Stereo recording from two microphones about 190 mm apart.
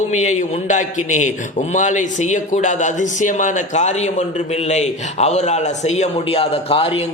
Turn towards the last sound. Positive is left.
turn(degrees=30)  # may be behind; listen again after turning